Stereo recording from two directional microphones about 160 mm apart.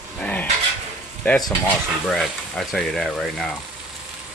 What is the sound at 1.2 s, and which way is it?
Speech, 5° left (ahead or behind).